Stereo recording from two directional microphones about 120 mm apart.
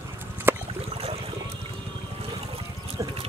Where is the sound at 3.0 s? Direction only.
25° right (ahead or behind).